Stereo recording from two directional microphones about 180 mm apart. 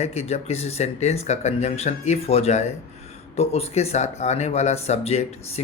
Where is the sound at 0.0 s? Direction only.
35° left (ahead or behind).